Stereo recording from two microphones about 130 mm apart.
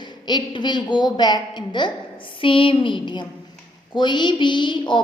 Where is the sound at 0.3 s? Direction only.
35° left (ahead or behind).